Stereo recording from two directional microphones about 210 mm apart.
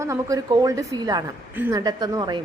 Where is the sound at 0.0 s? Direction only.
15° right (ahead or behind).